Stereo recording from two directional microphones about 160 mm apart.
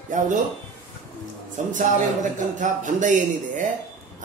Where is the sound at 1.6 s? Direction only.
50° right (ahead or behind).